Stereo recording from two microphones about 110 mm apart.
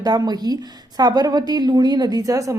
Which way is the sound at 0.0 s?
35° right (ahead or behind).